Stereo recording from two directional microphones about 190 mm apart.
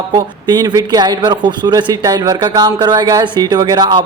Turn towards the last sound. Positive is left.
turn(degrees=-25)  # may be behind; listen again after turning